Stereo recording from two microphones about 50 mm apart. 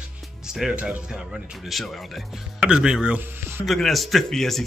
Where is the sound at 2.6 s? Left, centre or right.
Centre.